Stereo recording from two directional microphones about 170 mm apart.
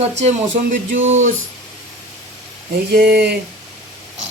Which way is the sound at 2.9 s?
65° right (ahead or behind).